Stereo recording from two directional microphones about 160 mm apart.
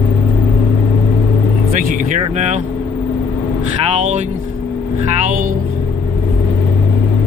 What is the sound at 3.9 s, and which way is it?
Speech, 50° right (ahead or behind).